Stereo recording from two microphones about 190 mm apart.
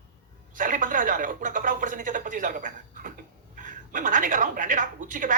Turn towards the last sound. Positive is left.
turn(degrees=-45)  # may be behind; listen again after turning